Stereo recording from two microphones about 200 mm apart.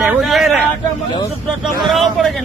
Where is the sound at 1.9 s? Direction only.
Centre (ahead or behind).